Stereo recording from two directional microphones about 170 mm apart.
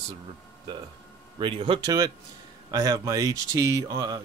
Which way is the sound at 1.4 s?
30° right (ahead or behind).